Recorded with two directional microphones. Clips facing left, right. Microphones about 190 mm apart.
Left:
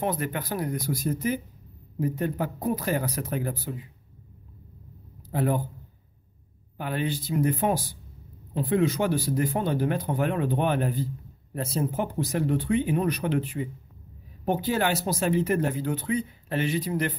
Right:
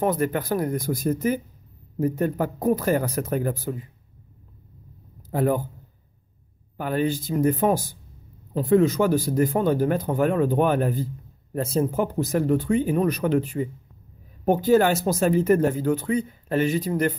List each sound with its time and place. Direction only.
0.0 s speech: 45° right (ahead or behind)
5.3 s speech: 45° right (ahead or behind)
6.8 s speech: 45° right (ahead or behind)